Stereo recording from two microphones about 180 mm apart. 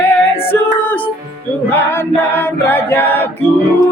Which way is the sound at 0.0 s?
10° left (ahead or behind).